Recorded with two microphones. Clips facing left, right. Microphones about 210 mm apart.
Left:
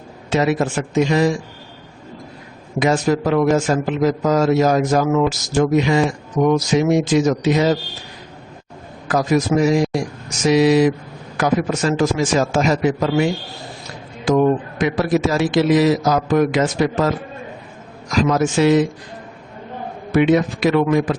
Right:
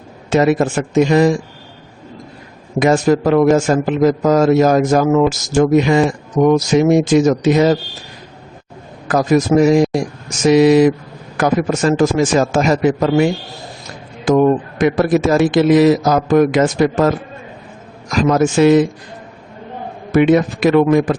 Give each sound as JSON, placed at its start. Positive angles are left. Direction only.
{"t": 0.3, "sound": "a man's voice", "side_deg": -50}
{"t": 2.7, "sound": "a man's voice", "side_deg": -50}
{"t": 9.0, "sound": "a man's voice", "side_deg": -45}
{"t": 14.3, "sound": "a man's voice", "side_deg": -50}
{"t": 18.1, "sound": "a man's voice", "side_deg": -50}
{"t": 20.1, "sound": "a man's voice", "side_deg": -50}